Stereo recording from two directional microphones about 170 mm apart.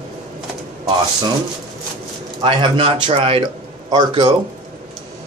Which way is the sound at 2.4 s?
30° right (ahead or behind).